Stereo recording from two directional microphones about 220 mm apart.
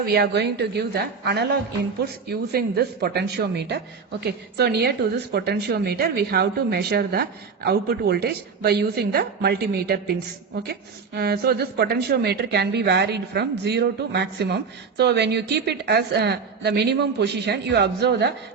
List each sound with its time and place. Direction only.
0.0 s a woman's voice: 45° right (ahead or behind)